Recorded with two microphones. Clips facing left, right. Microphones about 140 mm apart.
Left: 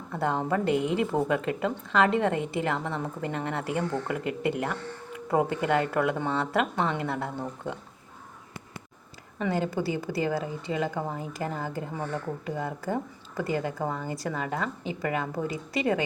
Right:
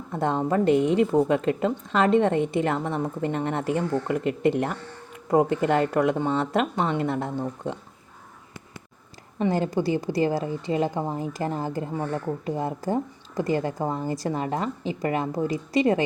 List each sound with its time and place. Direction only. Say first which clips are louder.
0.1 s speech: right 3 dB; 20° right (ahead or behind)
9.4 s a woman's voice: right 4 dB; 30° right (ahead or behind)